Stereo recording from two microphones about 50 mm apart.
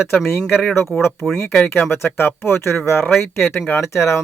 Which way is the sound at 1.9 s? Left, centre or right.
Left.